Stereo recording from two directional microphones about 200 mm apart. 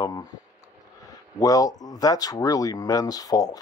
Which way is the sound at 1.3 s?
15° left (ahead or behind).